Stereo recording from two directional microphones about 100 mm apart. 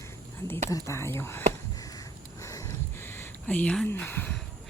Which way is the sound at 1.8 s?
35° left (ahead or behind).